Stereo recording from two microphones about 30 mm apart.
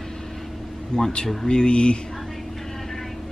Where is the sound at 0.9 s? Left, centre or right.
Left.